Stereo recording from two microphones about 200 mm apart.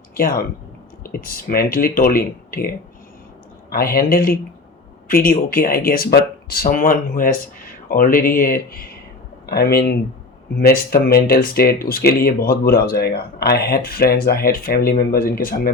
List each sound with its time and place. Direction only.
0.1 s speech: 45° left (ahead or behind)